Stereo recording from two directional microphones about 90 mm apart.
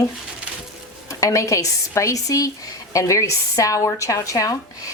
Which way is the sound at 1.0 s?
35° left (ahead or behind).